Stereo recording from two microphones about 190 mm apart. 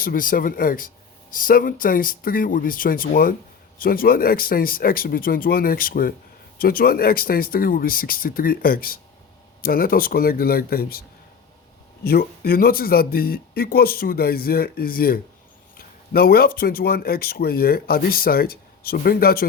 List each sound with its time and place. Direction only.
0.0 s speech: 45° left (ahead or behind)
12.0 s speech: 55° left (ahead or behind)